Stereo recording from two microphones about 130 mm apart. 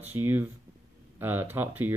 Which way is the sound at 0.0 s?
15° right (ahead or behind).